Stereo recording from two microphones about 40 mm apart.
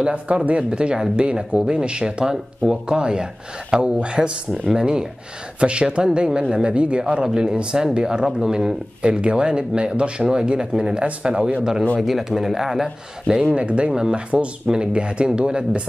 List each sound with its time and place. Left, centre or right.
0.0 s speech: right; by 8.7 s centre
9.0 s speech: right
11.0 s speech: right
12.0 s speech: centre
13.6 s speech: right